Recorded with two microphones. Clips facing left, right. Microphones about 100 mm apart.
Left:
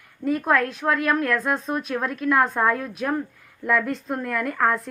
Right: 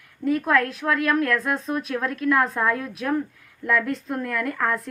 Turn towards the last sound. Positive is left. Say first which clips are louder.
# left 2 dB
turn(degrees=5)  # may be behind; listen again after turning